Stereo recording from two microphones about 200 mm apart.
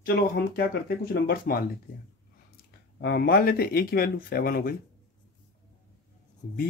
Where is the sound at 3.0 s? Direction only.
50° left (ahead or behind).